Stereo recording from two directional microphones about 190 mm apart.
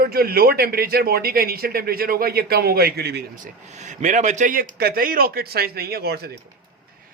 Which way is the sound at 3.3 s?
40° right (ahead or behind).